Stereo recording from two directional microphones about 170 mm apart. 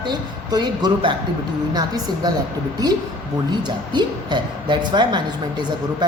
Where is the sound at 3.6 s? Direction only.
25° right (ahead or behind).